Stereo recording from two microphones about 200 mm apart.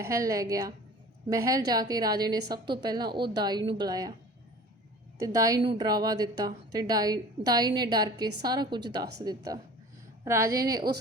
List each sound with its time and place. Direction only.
0.0 s a woman's voice: 15° right (ahead or behind)
5.2 s a woman's voice: 15° right (ahead or behind)